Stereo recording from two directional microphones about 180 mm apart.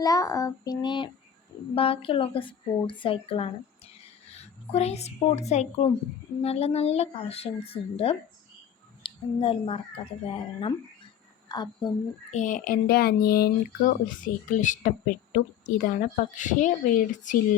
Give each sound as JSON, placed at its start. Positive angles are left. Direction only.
{"t": 0.0, "sound": "child singing", "side_deg": 20}
{"t": 1.7, "sound": "a woman's voice", "side_deg": 30}
{"t": 12.3, "sound": "speech", "side_deg": 45}